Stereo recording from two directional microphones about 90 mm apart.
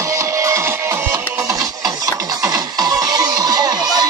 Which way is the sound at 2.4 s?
40° right (ahead or behind).